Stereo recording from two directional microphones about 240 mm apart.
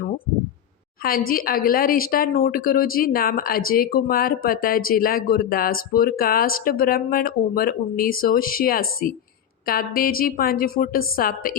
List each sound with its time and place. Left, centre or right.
1.3 s a woman's voice: left